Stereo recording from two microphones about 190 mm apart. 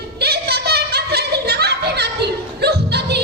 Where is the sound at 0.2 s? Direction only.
60° right (ahead or behind).